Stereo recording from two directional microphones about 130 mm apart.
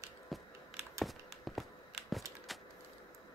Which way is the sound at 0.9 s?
Centre (ahead or behind).